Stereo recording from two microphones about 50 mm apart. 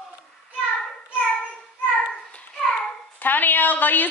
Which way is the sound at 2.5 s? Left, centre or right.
Centre.